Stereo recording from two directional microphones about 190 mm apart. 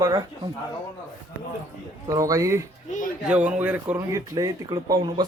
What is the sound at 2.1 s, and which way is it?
Speech, 20° right (ahead or behind).